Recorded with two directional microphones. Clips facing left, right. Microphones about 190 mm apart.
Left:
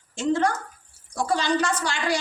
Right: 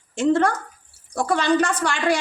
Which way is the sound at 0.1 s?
55° right (ahead or behind).